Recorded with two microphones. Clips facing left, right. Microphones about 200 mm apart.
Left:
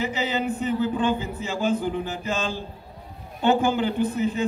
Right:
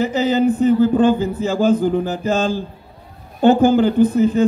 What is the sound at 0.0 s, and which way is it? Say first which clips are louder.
A man's voice: right 10 dB; 40° right (ahead or behind).